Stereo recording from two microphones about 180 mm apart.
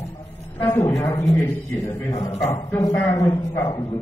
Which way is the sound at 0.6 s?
15° left (ahead or behind).